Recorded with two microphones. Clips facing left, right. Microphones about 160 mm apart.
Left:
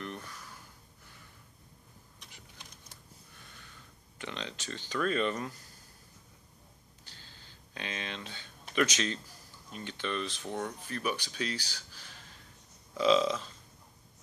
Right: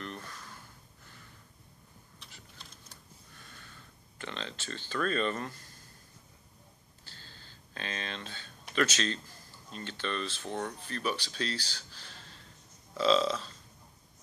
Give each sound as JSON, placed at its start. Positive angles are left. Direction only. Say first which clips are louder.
{"t": 2.1, "sound": "typewriter", "louder": "right 1 dB", "side_deg": 15}
{"t": 4.2, "sound": "speech", "louder": "even", "side_deg": 15}
{"t": 7.1, "sound": "a sound", "louder": "right 2 dB", "side_deg": 15}
{"t": 8.7, "sound": "speech", "louder": "even", "side_deg": 15}